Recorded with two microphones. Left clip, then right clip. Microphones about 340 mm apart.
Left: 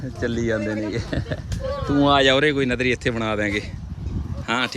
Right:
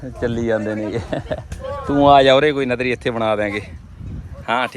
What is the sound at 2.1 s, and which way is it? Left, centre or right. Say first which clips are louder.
Speech: right 4 dB; centre.